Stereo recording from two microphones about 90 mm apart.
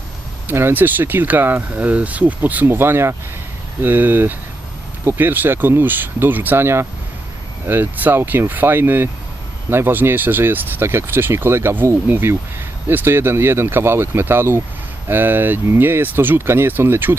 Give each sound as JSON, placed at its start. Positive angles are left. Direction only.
{"t": 0.4, "sound": "speech", "side_deg": -25}